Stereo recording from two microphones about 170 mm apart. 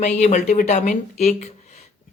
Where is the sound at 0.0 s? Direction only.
45° left (ahead or behind).